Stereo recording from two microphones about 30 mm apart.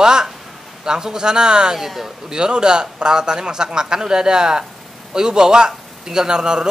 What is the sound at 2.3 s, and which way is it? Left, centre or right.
A man's voice, right.